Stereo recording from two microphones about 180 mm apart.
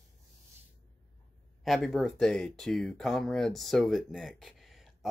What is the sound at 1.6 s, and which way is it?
Speech, centre (ahead or behind).